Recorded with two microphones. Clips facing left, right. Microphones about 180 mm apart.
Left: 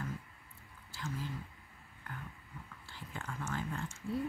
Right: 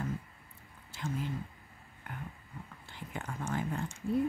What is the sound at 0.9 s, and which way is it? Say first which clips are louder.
Speech: right 5 dB; 20° right (ahead or behind).